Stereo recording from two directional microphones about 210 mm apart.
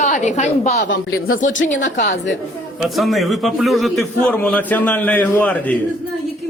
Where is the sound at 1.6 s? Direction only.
35° left (ahead or behind).